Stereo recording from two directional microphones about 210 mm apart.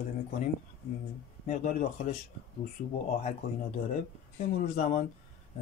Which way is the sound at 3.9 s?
35° left (ahead or behind).